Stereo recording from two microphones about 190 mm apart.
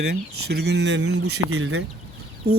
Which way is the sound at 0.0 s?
60° right (ahead or behind).